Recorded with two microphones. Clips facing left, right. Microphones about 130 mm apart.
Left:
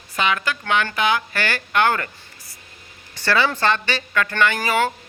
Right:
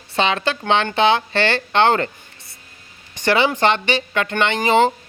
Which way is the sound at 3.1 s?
20° right (ahead or behind).